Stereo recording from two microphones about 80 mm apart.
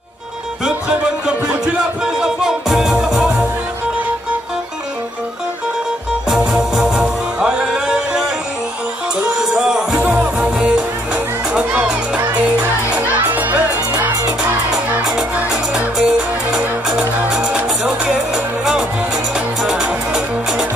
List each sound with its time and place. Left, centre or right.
0.7 s music: centre
6.2 s music: centre
9.4 s music: centre
12.9 s children shouting: right
14.7 s music: centre
15.3 s music: centre